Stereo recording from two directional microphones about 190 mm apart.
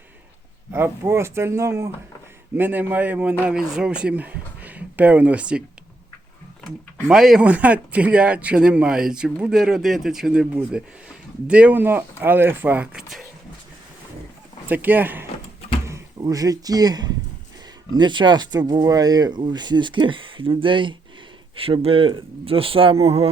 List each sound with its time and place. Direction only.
0.7 s a man's voice: 10° right (ahead or behind)
6.7 s a man's voice: centre (ahead or behind)
14.7 s a man's voice: 10° right (ahead or behind); by 23.3 s 30° right (ahead or behind)